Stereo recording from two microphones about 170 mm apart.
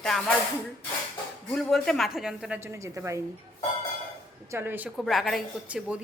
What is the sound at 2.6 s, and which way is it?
Speech, 15° right (ahead or behind).